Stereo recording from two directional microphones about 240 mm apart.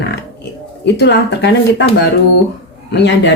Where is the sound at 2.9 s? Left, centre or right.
Left.